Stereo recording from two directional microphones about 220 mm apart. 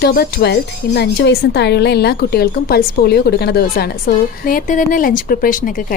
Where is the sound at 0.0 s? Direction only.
45° left (ahead or behind).